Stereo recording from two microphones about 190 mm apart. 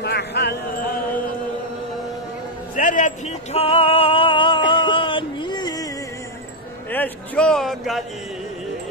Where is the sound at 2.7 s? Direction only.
45° left (ahead or behind).